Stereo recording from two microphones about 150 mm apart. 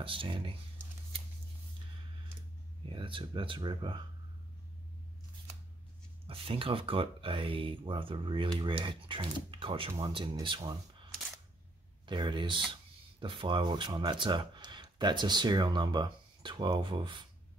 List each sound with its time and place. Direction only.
0.0 s speech: 35° right (ahead or behind)
2.8 s speech: 35° right (ahead or behind)
6.2 s speech: 40° right (ahead or behind)
12.1 s speech: 30° right (ahead or behind)